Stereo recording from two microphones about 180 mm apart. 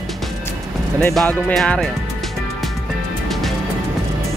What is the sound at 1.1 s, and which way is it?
Music, 5° left (ahead or behind).